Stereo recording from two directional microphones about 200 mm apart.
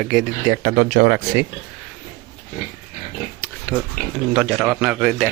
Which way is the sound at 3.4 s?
10° left (ahead or behind).